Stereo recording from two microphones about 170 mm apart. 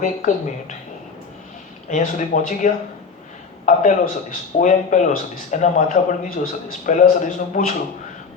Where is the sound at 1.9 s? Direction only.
50° left (ahead or behind).